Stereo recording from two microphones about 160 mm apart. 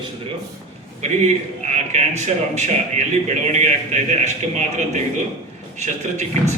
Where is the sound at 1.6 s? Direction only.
45° right (ahead or behind).